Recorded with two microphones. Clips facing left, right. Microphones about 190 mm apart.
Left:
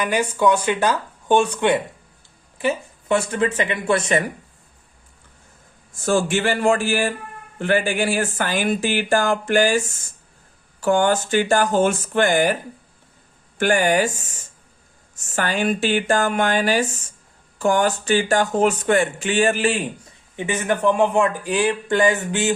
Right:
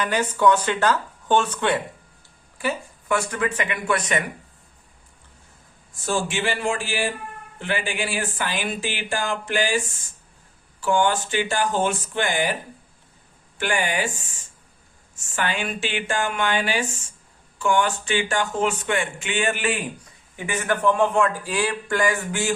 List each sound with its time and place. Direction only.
0.0 s speech: 10° left (ahead or behind); by 4.2 s 25° left (ahead or behind)
6.1 s speech: 45° left (ahead or behind)
13.6 s speech: 45° left (ahead or behind); by 22.5 s 20° left (ahead or behind)